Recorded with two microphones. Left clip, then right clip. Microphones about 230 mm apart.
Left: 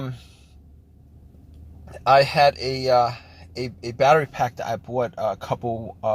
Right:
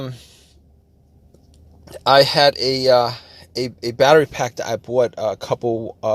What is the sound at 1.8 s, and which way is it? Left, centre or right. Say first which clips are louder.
Speech: right 3 dB; right.